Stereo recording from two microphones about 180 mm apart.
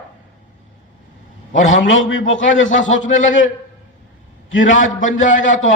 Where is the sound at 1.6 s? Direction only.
90° left.